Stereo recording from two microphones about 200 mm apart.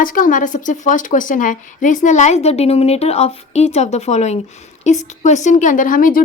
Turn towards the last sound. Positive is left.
turn(degrees=45)  # may be behind; listen again after turning